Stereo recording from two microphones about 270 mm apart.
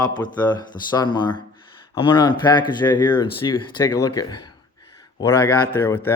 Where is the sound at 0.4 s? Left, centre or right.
Centre.